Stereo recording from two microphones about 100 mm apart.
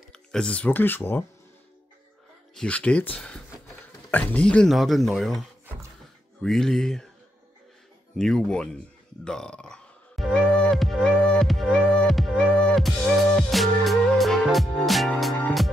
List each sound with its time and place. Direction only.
0.1 s speech: 5° left (ahead or behind)
2.5 s speech: 10° left (ahead or behind)
4.6 s speech: centre (ahead or behind)
6.4 s speech: 5° left (ahead or behind)
8.2 s speech: 5° left (ahead or behind)
9.2 s music: 10° left (ahead or behind)